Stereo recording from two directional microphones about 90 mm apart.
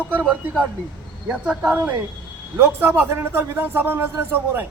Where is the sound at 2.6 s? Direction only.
25° right (ahead or behind).